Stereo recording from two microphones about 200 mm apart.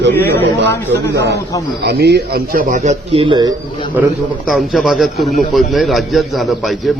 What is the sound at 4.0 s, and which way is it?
A man's voice, 10° right (ahead or behind).